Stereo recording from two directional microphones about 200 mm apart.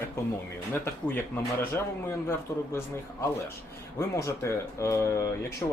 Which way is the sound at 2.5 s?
15° left (ahead or behind).